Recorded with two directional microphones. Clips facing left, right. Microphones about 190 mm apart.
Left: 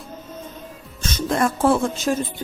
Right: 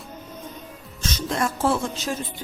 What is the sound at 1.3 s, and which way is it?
Speech, 55° left (ahead or behind).